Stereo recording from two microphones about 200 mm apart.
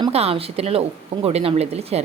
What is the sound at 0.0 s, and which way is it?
A woman's voice, 30° right (ahead or behind).